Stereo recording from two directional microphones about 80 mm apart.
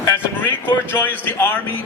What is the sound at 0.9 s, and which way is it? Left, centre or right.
Speech, left.